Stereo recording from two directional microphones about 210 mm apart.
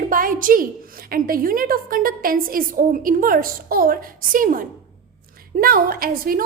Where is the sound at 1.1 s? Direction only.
45° right (ahead or behind).